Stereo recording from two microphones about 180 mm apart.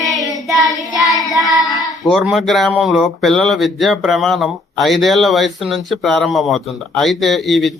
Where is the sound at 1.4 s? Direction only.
20° right (ahead or behind).